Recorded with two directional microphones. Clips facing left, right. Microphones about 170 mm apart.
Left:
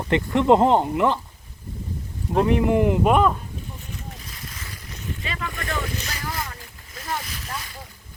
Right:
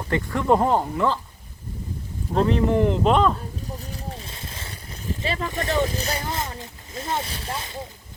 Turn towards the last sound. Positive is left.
turn(degrees=-25)  # may be behind; listen again after turning